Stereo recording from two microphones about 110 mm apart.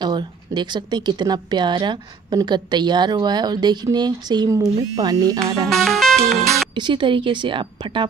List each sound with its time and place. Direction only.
0.0 s a woman's voice: 40° right (ahead or behind)
5.7 s music: 5° left (ahead or behind)
6.7 s speech: 45° right (ahead or behind)